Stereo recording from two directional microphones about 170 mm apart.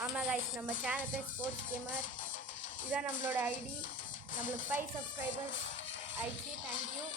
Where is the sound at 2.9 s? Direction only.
10° right (ahead or behind).